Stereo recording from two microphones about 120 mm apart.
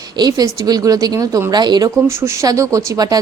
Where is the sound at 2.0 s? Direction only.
20° right (ahead or behind).